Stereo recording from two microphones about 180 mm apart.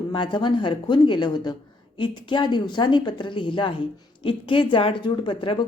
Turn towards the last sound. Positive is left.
turn(degrees=30)  # may be behind; listen again after turning